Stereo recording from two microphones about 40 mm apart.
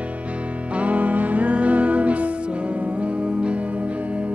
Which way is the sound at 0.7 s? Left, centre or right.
Right.